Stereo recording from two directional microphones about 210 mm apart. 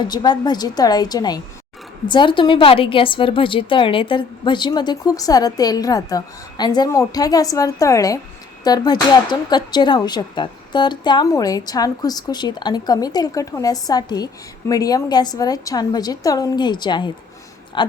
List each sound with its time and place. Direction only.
0.1 s a woman's voice: 20° left (ahead or behind)